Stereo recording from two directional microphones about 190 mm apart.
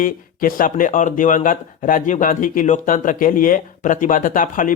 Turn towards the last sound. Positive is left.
turn(degrees=45)  # may be behind; listen again after turning